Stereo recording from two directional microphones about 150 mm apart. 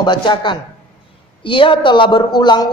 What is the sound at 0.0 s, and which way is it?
A man's voice, 30° left (ahead or behind).